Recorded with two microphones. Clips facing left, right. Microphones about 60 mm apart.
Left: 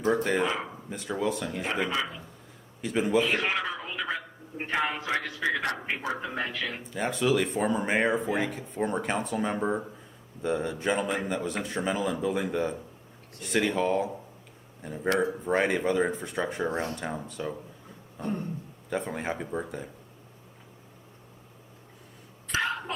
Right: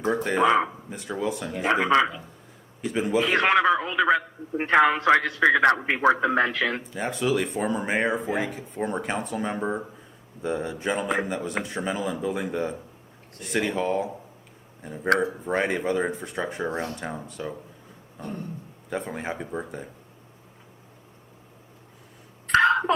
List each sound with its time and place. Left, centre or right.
0.3 s a man's voice: right
0.9 s speech: centre
1.6 s a man's voice: right
2.8 s speech: centre
3.2 s a man's voice: right
6.9 s speech: centre
18.9 s speech: centre
22.4 s a sound: right